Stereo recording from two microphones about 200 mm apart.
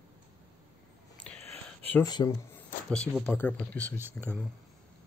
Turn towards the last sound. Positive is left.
turn(degrees=10)  # may be behind; listen again after turning